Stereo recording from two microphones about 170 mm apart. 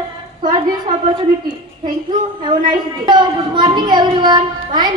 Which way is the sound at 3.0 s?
25° right (ahead or behind).